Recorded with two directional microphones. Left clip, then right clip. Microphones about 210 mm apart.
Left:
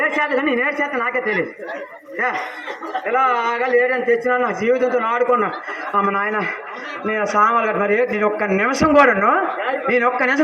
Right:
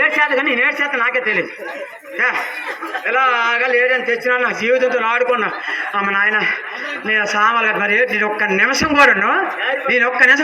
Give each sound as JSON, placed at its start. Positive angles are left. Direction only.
{"t": 0.0, "sound": "a man's voice", "side_deg": 45}
{"t": 3.1, "sound": "a man's voice", "side_deg": 45}